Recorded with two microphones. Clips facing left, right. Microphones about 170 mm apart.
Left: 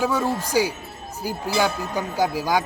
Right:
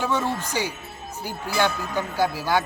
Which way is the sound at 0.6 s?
90° left.